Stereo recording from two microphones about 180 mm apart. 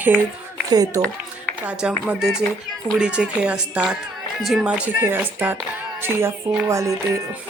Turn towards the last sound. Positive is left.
turn(degrees=-15)  # may be behind; listen again after turning